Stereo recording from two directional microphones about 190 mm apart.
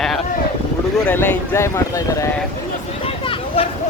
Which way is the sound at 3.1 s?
30° left (ahead or behind).